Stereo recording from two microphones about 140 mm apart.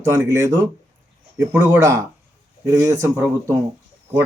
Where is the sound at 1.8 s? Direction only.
20° right (ahead or behind).